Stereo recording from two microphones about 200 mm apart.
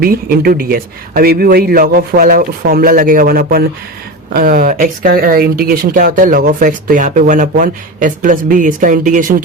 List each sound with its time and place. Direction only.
0.0 s speech: 45° right (ahead or behind)